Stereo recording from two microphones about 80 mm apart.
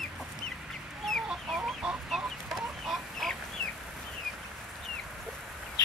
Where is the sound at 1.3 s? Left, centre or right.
Centre.